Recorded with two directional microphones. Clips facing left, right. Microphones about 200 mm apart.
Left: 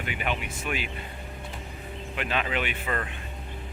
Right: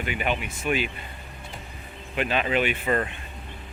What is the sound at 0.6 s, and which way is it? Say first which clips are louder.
Speech: right 7 dB; centre (ahead or behind).